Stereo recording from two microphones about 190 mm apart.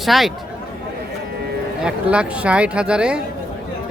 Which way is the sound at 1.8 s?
5° right (ahead or behind).